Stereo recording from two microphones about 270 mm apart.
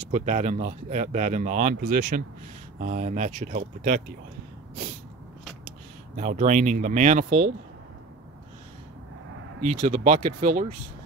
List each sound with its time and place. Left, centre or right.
0.1 s speech: right
6.1 s speech: right
9.7 s speech: right